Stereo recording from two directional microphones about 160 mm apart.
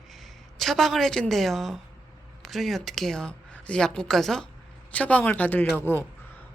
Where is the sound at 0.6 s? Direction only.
Centre (ahead or behind).